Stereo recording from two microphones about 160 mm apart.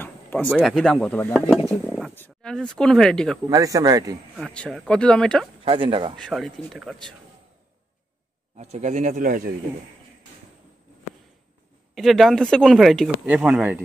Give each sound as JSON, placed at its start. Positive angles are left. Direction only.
{"t": 0.0, "sound": "a sound", "side_deg": 10}
{"t": 0.5, "sound": "speech", "side_deg": 0}
{"t": 2.1, "sound": "a sound", "side_deg": 15}
{"t": 2.5, "sound": "speech", "side_deg": 5}
{"t": 3.4, "sound": "speech", "side_deg": -20}
{"t": 4.6, "sound": "speech", "side_deg": 5}
{"t": 5.7, "sound": "speech", "side_deg": -35}
{"t": 6.1, "sound": "speech", "side_deg": 0}
{"t": 8.5, "sound": "speech", "side_deg": -45}
{"t": 11.9, "sound": "speech", "side_deg": 0}